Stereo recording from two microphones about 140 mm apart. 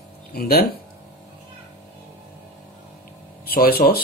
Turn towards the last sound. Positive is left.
turn(degrees=90)